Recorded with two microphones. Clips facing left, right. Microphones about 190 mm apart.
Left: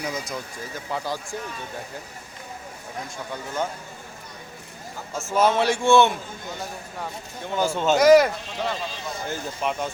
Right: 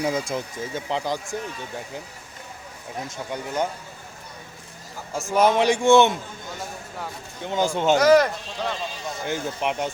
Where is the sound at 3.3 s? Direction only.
15° right (ahead or behind).